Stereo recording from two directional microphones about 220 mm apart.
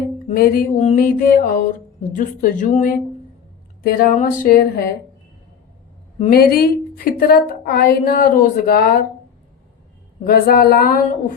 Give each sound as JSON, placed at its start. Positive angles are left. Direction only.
{"t": 0.3, "sound": "speech", "side_deg": 40}
{"t": 6.1, "sound": "a woman's voice", "side_deg": 30}
{"t": 6.4, "sound": "speech", "side_deg": 40}
{"t": 10.2, "sound": "a sound", "side_deg": 40}